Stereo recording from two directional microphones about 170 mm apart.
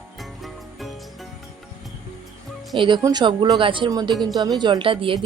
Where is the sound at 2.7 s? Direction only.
30° right (ahead or behind).